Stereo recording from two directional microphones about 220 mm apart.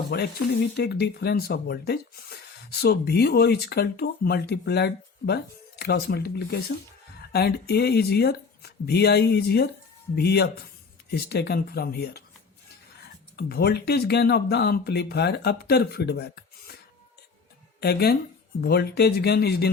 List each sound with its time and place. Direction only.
0.1 s speech: 45° left (ahead or behind)
13.3 s speech: 45° left (ahead or behind)
17.7 s speech: 45° left (ahead or behind)